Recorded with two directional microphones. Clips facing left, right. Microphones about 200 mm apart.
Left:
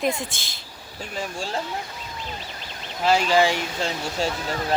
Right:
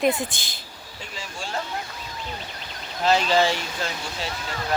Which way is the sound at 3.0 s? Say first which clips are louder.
Left 1 dB; 10° left (ahead or behind).